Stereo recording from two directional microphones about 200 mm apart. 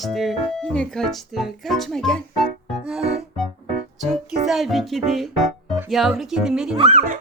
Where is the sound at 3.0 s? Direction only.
30° right (ahead or behind).